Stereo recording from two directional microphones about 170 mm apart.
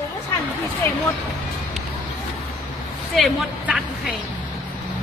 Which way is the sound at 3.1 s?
Centre (ahead or behind).